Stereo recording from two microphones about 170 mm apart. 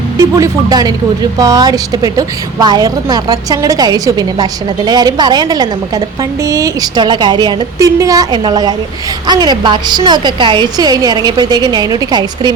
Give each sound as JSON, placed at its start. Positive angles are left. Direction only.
{"t": 0.2, "sound": "a woman's voice", "side_deg": -20}